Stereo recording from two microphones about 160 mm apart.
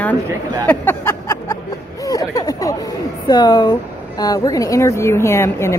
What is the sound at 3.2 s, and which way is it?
Speech, 25° left (ahead or behind).